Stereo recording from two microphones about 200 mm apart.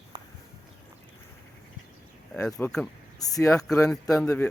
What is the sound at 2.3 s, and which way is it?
Speech, 5° left (ahead or behind).